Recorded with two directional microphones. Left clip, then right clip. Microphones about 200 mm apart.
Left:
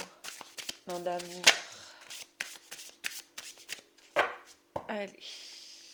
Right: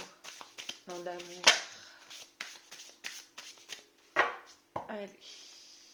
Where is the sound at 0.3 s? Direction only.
40° left (ahead or behind).